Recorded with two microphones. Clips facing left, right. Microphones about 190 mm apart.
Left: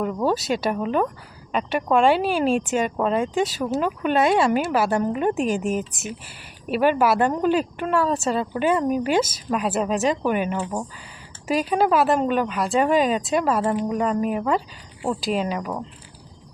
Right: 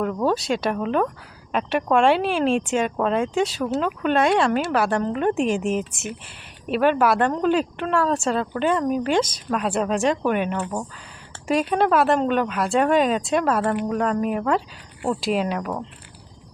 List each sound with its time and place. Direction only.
0.0 s speech: 5° left (ahead or behind)